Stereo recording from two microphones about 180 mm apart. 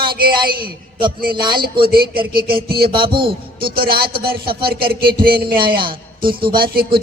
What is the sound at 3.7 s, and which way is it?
Speech, 55° right (ahead or behind).